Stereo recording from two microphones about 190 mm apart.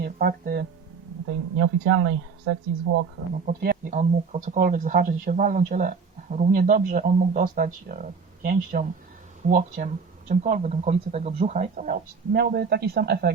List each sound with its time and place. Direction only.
0.0 s speech: 55° right (ahead or behind)
1.5 s speech: 90° right
3.4 s speech: 50° right (ahead or behind)